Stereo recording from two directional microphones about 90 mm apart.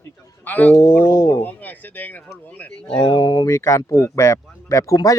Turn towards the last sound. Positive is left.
turn(degrees=40)  # may be behind; listen again after turning